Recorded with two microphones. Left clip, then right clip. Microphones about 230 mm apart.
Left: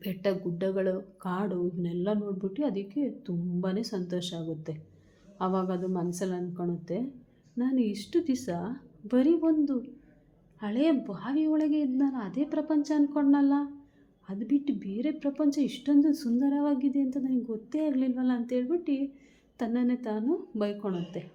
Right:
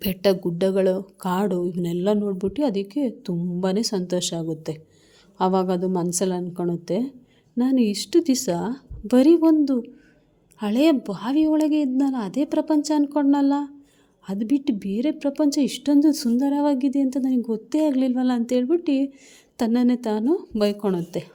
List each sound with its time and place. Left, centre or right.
0.0 s a woman's voice: right